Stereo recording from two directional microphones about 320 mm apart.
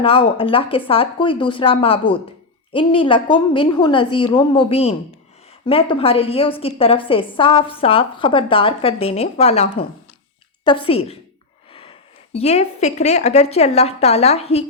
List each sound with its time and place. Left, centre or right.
0.0 s a woman's voice: centre